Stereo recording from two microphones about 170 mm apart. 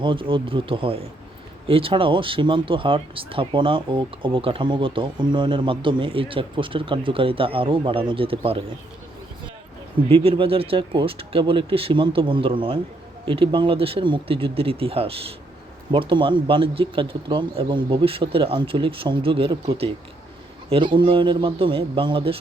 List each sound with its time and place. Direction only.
0.0 s speech: 30° right (ahead or behind)
10.1 s a man's voice: 35° right (ahead or behind)